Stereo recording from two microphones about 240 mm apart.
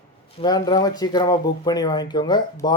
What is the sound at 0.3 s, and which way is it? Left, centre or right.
Speech, centre.